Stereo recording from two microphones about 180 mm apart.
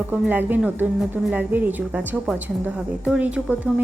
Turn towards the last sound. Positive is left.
turn(degrees=-10)  # may be behind; listen again after turning